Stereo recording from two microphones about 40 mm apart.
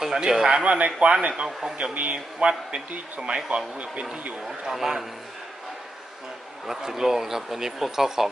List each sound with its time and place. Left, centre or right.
0.0 s a man's voice: centre
0.6 s a man's voice: right
2.1 s speech: right
4.4 s speech: centre
6.7 s speech: centre